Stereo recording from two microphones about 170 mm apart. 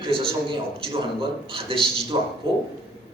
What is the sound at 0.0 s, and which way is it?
A man's voice, 30° right (ahead or behind).